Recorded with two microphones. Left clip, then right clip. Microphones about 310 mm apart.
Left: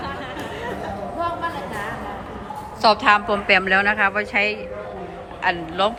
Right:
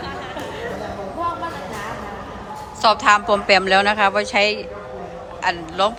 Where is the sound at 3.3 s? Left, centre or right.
Centre.